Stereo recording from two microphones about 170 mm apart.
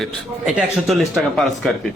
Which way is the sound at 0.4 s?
Centre (ahead or behind).